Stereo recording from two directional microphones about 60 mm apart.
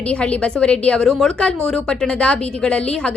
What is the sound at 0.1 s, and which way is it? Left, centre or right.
Speech, centre.